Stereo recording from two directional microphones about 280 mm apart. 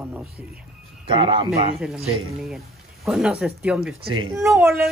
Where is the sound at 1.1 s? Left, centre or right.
Centre.